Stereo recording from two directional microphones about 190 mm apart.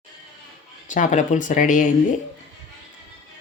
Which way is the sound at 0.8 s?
40° left (ahead or behind).